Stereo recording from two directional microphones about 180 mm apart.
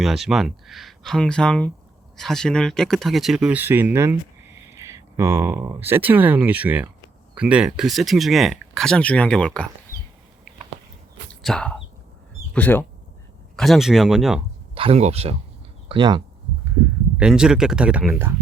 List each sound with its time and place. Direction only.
0.0 s speech: centre (ahead or behind)
11.3 s speech: 5° left (ahead or behind)
14.8 s speech: 35° right (ahead or behind)
17.2 s speech: 5° right (ahead or behind)